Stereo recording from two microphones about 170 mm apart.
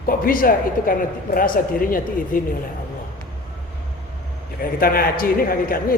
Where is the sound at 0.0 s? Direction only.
55° left (ahead or behind).